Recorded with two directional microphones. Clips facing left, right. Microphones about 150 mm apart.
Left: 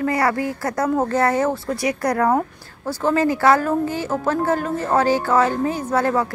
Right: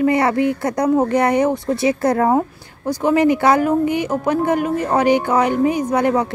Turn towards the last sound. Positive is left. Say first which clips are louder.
# right 3 dB
turn(degrees=-20)  # may be behind; listen again after turning